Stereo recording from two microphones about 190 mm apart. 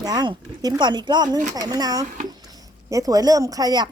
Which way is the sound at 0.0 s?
20° right (ahead or behind).